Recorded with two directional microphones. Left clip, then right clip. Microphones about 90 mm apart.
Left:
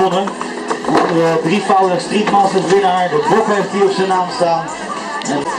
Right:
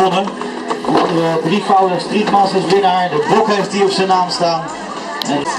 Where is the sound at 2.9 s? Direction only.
30° right (ahead or behind).